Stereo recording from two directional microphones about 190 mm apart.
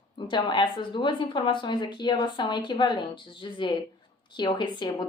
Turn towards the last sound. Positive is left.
turn(degrees=20)  # may be behind; listen again after turning